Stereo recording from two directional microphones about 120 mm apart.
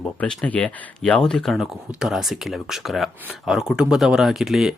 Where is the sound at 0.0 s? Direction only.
10° left (ahead or behind).